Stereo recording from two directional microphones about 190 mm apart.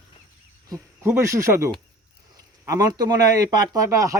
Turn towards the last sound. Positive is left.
turn(degrees=-15)  # may be behind; listen again after turning